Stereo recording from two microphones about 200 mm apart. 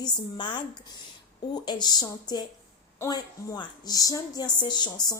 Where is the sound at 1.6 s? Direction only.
20° left (ahead or behind).